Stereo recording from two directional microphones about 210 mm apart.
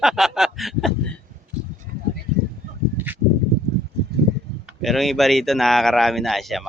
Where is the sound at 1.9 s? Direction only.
45° right (ahead or behind).